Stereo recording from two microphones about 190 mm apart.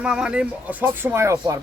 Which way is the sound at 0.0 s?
5° right (ahead or behind).